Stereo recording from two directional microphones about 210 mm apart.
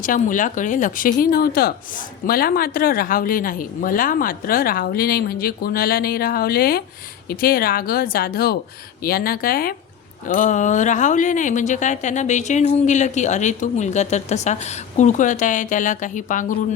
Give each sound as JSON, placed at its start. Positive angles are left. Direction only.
{"t": 0.0, "sound": "speech", "side_deg": 40}